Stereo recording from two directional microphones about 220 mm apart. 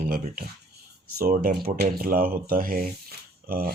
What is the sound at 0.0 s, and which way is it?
Speech, 40° right (ahead or behind).